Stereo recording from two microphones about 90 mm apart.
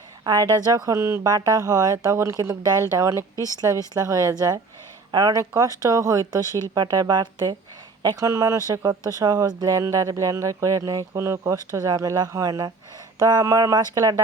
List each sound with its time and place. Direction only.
0.5 s speech: 45° right (ahead or behind)
1.2 s speech: 45° right (ahead or behind)
3.3 s speech: 35° left (ahead or behind)
3.9 s speech: 40° right (ahead or behind)
5.1 s speech: 50° right (ahead or behind)
5.4 s speech: 35° right (ahead or behind)
8.0 s speech: 35° right (ahead or behind)